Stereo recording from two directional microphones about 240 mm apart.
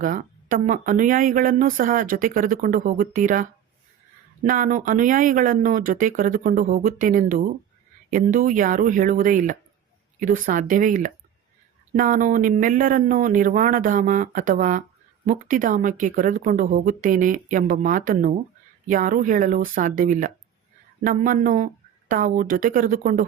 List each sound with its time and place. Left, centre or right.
0.0 s speech: right